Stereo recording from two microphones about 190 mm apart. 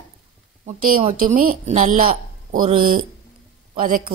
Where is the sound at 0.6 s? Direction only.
45° right (ahead or behind).